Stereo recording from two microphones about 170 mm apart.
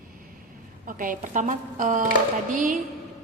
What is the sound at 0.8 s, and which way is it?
A woman's voice, 50° right (ahead or behind).